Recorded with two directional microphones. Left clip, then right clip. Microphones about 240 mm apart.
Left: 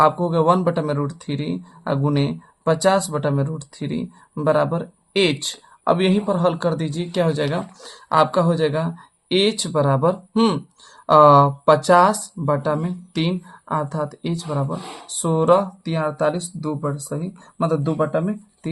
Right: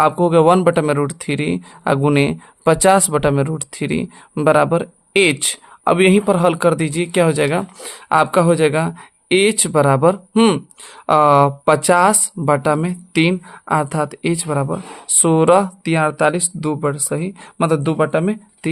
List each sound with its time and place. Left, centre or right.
0.0 s speech: right